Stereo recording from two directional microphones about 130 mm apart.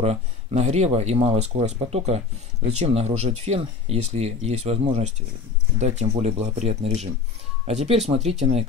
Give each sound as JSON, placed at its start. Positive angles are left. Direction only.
{"t": 0.0, "sound": "speech", "side_deg": -55}